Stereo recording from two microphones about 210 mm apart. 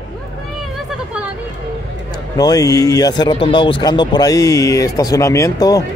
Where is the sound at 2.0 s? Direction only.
20° left (ahead or behind).